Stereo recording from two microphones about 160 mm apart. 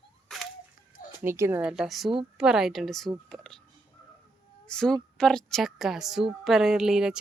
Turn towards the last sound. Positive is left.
turn(degrees=-5)  # may be behind; listen again after turning